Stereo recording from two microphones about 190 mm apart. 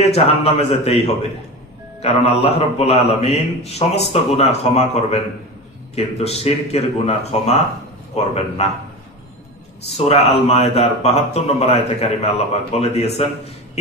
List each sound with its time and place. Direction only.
0.0 s a man's voice: 30° left (ahead or behind)
9.9 s a man's voice: 35° left (ahead or behind)